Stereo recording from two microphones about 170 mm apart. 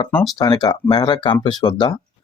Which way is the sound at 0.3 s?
25° left (ahead or behind).